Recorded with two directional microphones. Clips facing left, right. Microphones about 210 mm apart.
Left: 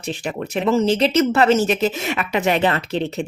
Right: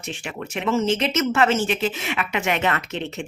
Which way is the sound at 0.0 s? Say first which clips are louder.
Left 6 dB; 35° left (ahead or behind).